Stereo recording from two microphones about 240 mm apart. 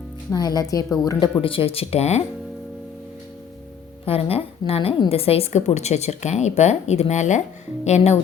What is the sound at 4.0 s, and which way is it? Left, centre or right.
A woman's voice, left.